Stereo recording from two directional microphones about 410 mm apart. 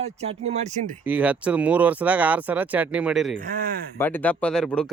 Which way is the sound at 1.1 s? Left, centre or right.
Centre.